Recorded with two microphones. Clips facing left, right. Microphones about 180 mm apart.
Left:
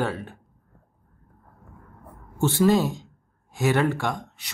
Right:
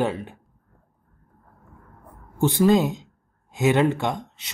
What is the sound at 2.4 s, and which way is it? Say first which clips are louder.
Speech: right 2 dB; 15° right (ahead or behind).